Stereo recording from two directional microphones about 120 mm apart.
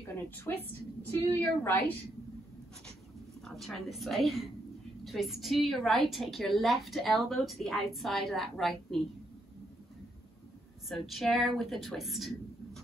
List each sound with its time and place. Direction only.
0.1 s a woman's voice: 20° left (ahead or behind)
3.4 s a woman's voice: centre (ahead or behind)
10.9 s a woman's voice: centre (ahead or behind)